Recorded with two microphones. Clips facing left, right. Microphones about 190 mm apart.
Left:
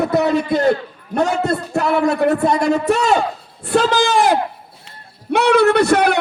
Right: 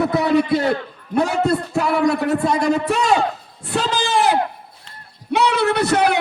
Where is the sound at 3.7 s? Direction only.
45° left (ahead or behind).